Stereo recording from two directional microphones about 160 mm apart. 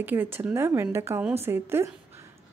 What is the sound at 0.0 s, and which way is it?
Speech, 15° right (ahead or behind).